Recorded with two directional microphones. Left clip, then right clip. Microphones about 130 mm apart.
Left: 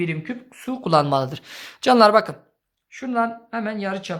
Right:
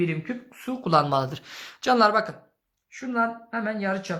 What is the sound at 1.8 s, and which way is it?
Speech, 40° left (ahead or behind).